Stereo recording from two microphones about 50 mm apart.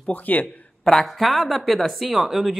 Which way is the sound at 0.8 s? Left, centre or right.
Centre.